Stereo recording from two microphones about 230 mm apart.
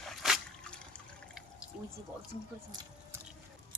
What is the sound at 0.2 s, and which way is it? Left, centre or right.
Drip, centre.